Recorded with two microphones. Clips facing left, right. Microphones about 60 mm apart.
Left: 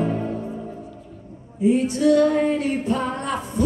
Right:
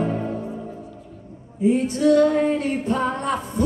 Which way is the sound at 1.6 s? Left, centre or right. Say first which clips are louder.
Even; right.